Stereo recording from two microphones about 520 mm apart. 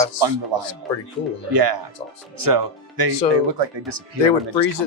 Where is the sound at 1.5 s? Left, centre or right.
Right.